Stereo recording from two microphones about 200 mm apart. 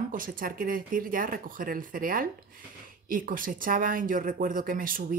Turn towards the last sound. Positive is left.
turn(degrees=-45)  # may be behind; listen again after turning